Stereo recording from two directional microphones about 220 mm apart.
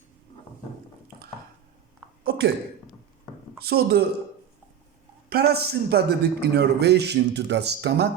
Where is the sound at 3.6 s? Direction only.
45° right (ahead or behind).